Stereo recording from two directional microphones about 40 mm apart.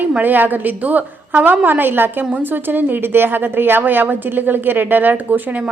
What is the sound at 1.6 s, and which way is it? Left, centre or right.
A woman's voice, right.